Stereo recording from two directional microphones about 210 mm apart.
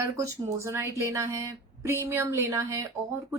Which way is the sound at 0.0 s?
15° right (ahead or behind).